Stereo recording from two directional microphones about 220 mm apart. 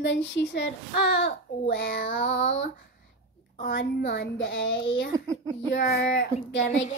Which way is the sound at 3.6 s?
50° left (ahead or behind).